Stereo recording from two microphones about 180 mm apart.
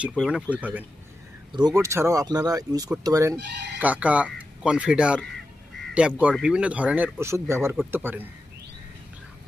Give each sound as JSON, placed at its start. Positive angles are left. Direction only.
{"t": 0.0, "sound": "speech", "side_deg": -5}
{"t": 1.5, "sound": "speech", "side_deg": -20}
{"t": 3.3, "sound": "speech", "side_deg": -70}
{"t": 3.8, "sound": "speech", "side_deg": -10}